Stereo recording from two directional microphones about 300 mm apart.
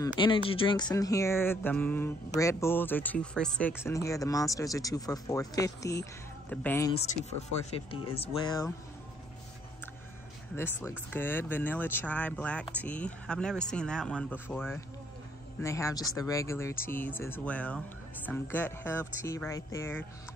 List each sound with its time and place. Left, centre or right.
0.0 s speech: centre
7.0 s speech: left
10.5 s speech: centre